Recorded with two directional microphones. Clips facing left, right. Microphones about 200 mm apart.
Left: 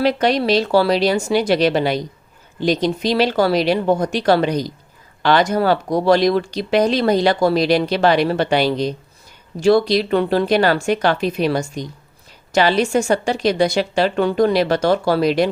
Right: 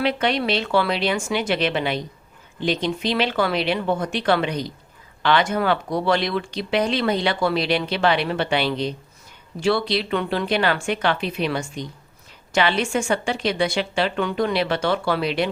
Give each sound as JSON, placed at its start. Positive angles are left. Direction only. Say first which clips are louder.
{"t": 0.0, "sound": "speech", "louder": "left 5 dB", "side_deg": 40}